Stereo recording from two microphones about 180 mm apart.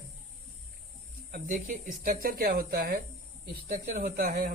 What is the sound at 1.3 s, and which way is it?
Speech, 50° right (ahead or behind).